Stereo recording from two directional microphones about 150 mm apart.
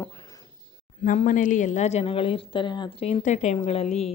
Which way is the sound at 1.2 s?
60° left (ahead or behind).